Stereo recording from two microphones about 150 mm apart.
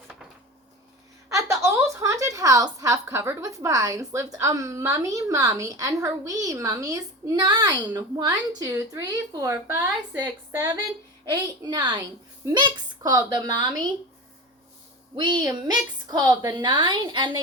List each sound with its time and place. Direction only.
1.3 s a sound: 20° right (ahead or behind)
4.4 s a woman's voice: 20° right (ahead or behind)
15.1 s a woman's voice: 30° right (ahead or behind)